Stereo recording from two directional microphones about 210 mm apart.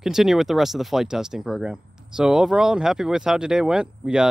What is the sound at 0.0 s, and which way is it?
Speech, centre (ahead or behind).